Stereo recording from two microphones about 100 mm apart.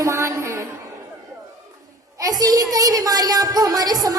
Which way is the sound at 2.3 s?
40° right (ahead or behind).